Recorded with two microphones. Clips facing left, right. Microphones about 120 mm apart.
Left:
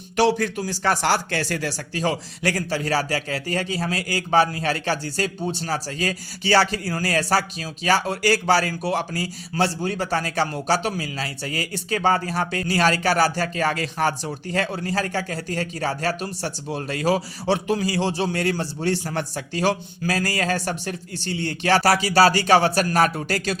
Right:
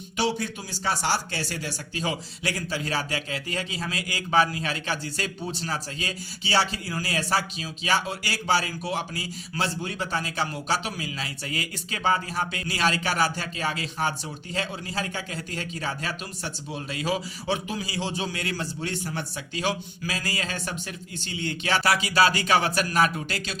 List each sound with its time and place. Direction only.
0.3 s speech: 75° left (ahead or behind)
0.6 s a man's voice: 55° left (ahead or behind)